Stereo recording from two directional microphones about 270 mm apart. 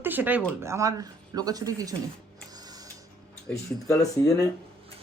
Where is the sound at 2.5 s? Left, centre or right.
Centre.